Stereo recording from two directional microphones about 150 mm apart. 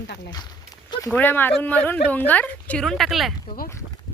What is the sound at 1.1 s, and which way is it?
A woman's voice, 10° left (ahead or behind).